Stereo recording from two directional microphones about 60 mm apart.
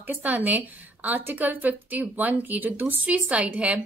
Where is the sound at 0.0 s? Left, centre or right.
Right.